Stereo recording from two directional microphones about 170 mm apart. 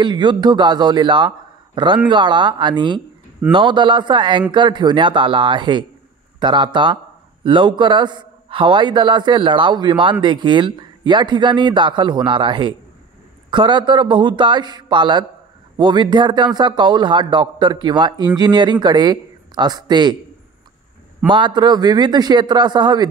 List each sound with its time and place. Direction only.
0.0 s a man's voice: 25° right (ahead or behind)
21.3 s a man's voice: 25° right (ahead or behind)